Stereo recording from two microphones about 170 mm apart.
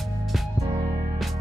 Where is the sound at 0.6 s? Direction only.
20° right (ahead or behind).